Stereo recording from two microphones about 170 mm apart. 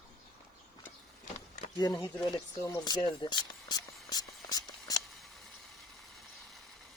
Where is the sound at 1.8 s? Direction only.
25° left (ahead or behind).